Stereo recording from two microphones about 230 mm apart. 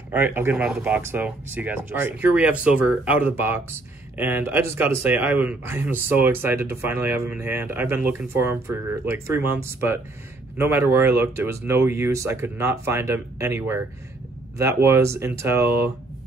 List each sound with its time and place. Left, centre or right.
0.1 s speech: centre